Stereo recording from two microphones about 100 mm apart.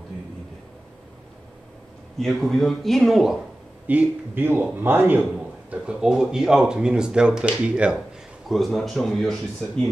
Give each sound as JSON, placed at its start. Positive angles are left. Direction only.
{"t": 2.1, "sound": "speech", "side_deg": 5}
{"t": 3.8, "sound": "a man's voice", "side_deg": -15}
{"t": 5.7, "sound": "speech", "side_deg": -10}
{"t": 8.5, "sound": "speech", "side_deg": 0}